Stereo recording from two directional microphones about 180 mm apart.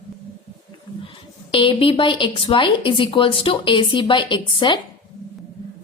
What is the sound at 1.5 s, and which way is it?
A woman's voice, 30° left (ahead or behind).